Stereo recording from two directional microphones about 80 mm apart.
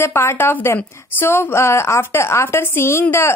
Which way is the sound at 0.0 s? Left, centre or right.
Left.